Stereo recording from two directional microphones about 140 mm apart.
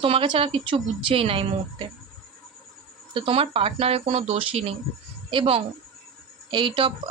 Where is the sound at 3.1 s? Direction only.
40° right (ahead or behind).